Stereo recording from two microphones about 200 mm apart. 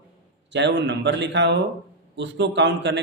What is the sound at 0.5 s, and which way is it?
Speech, 60° right (ahead or behind).